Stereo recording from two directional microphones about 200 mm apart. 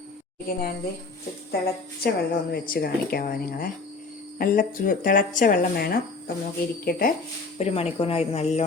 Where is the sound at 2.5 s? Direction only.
45° left (ahead or behind).